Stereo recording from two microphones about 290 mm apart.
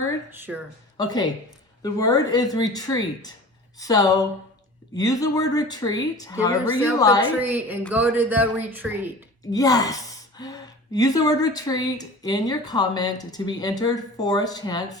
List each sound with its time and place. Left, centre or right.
0.3 s a woman's voice: centre
0.9 s speech: centre
7.3 s a woman's voice: centre
9.4 s speech: centre